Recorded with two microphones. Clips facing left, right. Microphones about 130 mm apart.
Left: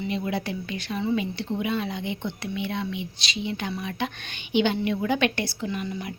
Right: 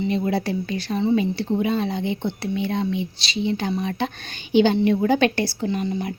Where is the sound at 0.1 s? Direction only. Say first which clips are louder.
Right 6 dB; 35° right (ahead or behind).